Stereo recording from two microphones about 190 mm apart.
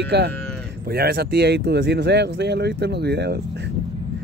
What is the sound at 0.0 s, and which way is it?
Speech, 60° right (ahead or behind).